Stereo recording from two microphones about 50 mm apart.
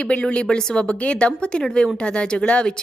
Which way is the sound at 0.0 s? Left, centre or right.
Left.